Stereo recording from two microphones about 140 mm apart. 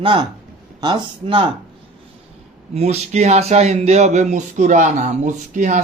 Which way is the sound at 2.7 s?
50° right (ahead or behind).